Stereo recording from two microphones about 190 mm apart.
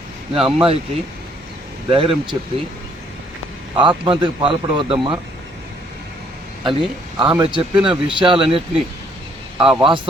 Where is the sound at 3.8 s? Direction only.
25° right (ahead or behind).